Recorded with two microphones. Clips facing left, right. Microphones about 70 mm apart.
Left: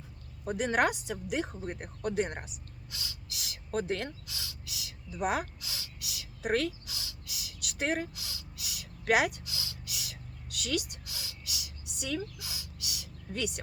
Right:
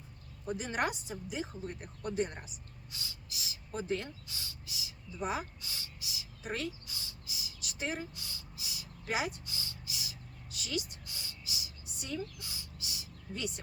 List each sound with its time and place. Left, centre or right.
0.4 s speech: left
2.9 s speech: left